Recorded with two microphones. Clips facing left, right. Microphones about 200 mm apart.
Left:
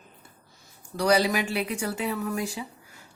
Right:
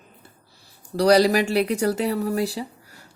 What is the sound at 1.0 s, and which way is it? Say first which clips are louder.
Speech: right 6 dB; 40° right (ahead or behind).